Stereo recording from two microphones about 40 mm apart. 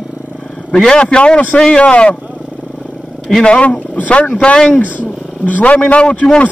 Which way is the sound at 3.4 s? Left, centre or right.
Left.